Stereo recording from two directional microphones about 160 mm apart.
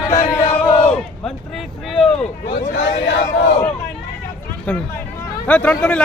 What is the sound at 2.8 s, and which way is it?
Speech, 90° left.